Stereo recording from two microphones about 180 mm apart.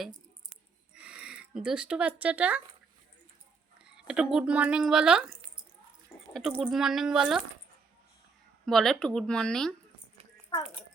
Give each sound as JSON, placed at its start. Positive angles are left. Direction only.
{"t": 0.9, "sound": "speech", "side_deg": -5}
{"t": 3.8, "sound": "speech", "side_deg": -5}
{"t": 6.5, "sound": "speech", "side_deg": 0}
{"t": 8.6, "sound": "speech", "side_deg": 0}